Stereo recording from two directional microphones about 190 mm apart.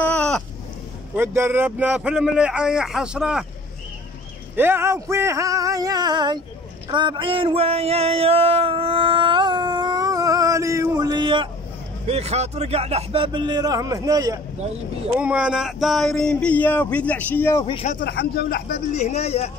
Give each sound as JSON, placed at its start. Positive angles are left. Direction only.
{"t": 0.0, "sound": "a sound", "side_deg": 5}
{"t": 1.1, "sound": "speech", "side_deg": -10}
{"t": 4.6, "sound": "male singing", "side_deg": -10}
{"t": 6.9, "sound": "a sound", "side_deg": -25}
{"t": 12.1, "sound": "a man's voice", "side_deg": -35}
{"t": 15.1, "sound": "speech", "side_deg": -5}
{"t": 17.6, "sound": "speech", "side_deg": 30}
{"t": 17.9, "sound": "speech", "side_deg": 55}
{"t": 18.9, "sound": "speech", "side_deg": 35}